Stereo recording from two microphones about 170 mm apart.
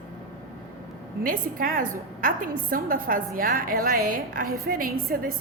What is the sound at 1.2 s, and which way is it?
A woman's voice, 55° right (ahead or behind).